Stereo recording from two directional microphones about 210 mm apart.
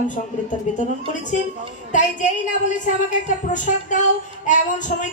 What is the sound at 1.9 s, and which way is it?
Music, 35° left (ahead or behind).